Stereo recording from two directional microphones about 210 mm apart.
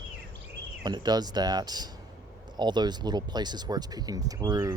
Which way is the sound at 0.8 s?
20° right (ahead or behind).